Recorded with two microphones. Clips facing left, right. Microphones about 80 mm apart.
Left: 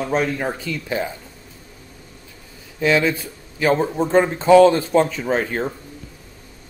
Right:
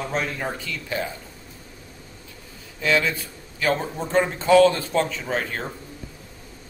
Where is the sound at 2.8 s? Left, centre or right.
Left.